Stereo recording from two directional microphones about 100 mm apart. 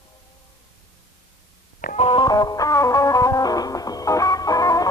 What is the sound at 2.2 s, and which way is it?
Music, 40° left (ahead or behind).